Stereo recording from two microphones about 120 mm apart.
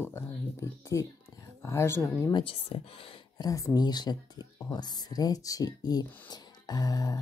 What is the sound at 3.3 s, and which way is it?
Speech, 30° left (ahead or behind).